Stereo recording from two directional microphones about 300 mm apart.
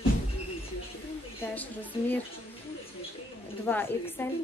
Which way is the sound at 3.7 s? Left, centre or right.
Centre.